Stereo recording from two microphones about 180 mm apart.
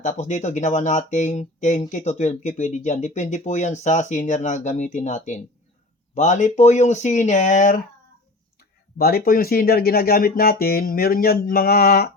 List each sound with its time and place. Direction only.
0.0 s speech: 40° left (ahead or behind)
9.0 s speech: 60° left (ahead or behind)